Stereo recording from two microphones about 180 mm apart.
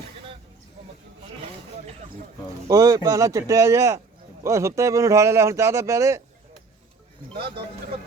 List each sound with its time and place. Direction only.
2.6 s speech: 20° right (ahead or behind)
7.3 s speech: 60° right (ahead or behind)